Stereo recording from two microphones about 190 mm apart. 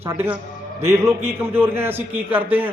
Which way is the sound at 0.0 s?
10° right (ahead or behind).